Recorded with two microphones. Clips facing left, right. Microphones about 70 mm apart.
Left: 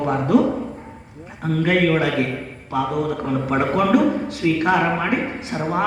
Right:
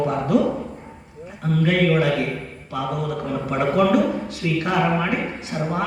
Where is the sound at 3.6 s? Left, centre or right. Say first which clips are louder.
Even; left.